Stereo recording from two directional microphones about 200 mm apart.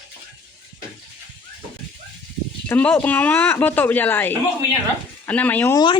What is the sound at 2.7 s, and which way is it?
Speech, 10° left (ahead or behind).